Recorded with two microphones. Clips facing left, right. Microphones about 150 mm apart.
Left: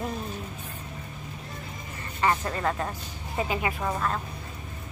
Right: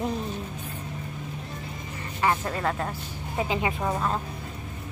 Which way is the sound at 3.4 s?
15° right (ahead or behind).